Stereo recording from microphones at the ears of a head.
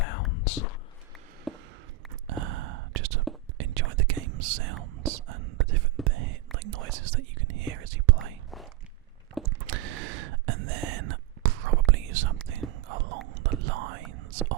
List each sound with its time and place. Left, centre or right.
0.0 s whispering: left
2.2 s whispering: right
9.4 s whispering: right